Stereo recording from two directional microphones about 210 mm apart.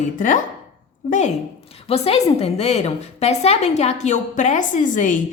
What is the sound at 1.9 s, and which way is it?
A woman's voice, 30° left (ahead or behind).